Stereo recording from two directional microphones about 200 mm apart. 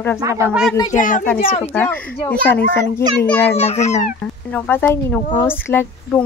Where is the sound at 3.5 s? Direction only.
35° left (ahead or behind).